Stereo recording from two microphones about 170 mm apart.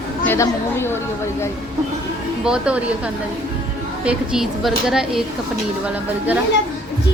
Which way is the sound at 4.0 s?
5° right (ahead or behind).